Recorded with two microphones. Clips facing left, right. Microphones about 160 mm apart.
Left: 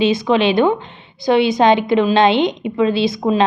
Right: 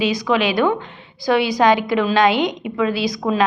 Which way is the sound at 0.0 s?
25° left (ahead or behind).